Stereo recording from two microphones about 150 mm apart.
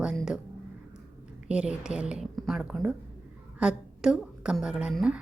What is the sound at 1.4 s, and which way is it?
A woman's voice, 5° right (ahead or behind).